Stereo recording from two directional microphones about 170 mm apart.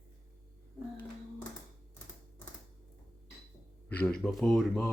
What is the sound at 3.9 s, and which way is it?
Speech, 10° left (ahead or behind).